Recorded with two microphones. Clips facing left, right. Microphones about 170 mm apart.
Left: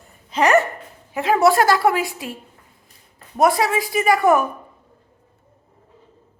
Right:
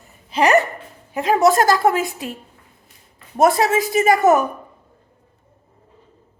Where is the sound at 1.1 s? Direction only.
40° right (ahead or behind).